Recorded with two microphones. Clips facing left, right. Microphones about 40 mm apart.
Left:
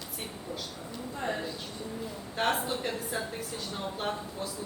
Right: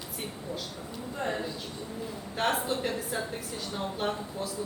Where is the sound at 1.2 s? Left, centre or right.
Centre.